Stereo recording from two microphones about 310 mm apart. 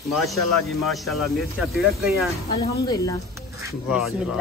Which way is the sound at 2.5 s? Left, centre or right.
Centre.